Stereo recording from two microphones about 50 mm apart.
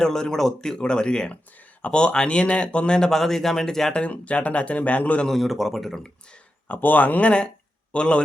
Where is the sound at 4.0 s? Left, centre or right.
Left.